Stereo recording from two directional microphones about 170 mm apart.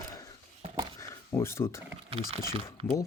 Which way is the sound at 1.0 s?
15° left (ahead or behind).